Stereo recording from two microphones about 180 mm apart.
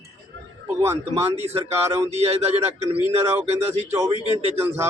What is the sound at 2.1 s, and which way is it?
Speech, 35° right (ahead or behind).